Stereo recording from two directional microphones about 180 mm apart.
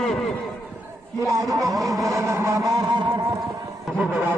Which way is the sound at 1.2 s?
20° right (ahead or behind).